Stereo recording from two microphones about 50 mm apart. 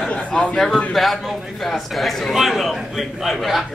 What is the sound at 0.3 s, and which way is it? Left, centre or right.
A man's voice, centre.